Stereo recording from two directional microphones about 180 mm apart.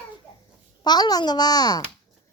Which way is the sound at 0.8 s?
20° left (ahead or behind).